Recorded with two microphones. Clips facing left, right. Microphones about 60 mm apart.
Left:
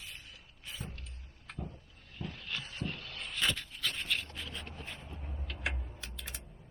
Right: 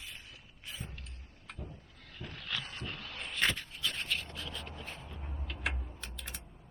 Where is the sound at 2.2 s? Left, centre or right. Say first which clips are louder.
Left 3 dB; right.